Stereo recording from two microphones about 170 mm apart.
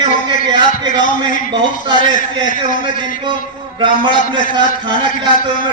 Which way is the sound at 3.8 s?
30° right (ahead or behind).